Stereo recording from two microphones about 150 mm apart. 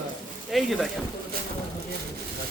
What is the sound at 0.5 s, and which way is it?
Speech, centre (ahead or behind).